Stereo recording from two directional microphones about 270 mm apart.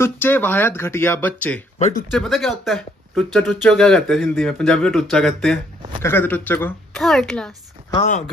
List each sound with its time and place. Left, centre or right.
0.0 s speech: centre
1.8 s speech: left
2.0 s speech: centre
7.9 s speech: left